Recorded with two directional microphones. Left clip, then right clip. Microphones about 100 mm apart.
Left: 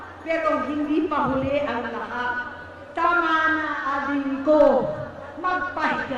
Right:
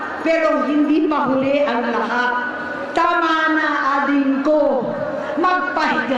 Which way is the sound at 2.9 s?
40° right (ahead or behind).